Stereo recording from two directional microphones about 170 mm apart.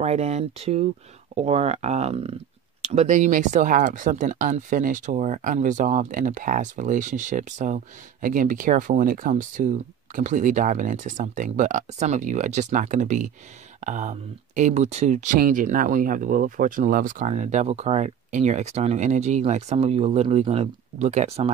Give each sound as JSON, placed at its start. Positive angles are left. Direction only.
{"t": 0.0, "sound": "speech", "side_deg": -40}